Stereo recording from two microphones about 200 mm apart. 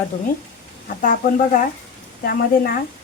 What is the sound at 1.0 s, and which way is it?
A woman's voice, 40° left (ahead or behind).